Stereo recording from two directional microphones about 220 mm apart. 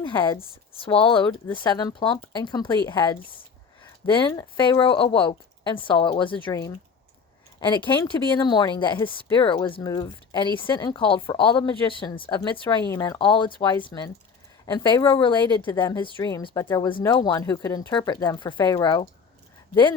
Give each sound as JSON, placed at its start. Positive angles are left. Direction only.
{"t": 0.0, "sound": "speech", "side_deg": 20}